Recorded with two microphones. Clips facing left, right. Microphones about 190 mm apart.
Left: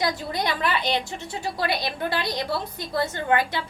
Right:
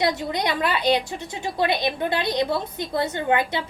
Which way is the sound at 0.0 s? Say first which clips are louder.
Right 3 dB; 20° right (ahead or behind).